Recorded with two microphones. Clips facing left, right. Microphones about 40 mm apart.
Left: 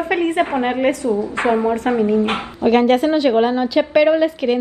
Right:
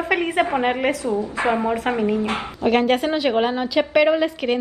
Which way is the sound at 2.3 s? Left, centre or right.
Left.